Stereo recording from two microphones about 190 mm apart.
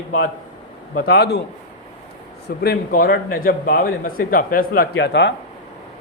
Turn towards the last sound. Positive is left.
turn(degrees=65)  # may be behind; listen again after turning